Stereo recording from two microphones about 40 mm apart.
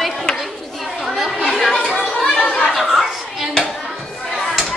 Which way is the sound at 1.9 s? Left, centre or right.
Left.